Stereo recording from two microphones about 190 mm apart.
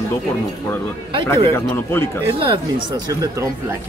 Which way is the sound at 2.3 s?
25° right (ahead or behind).